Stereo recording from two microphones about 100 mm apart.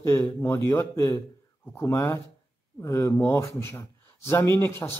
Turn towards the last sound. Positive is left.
turn(degrees=25)  # may be behind; listen again after turning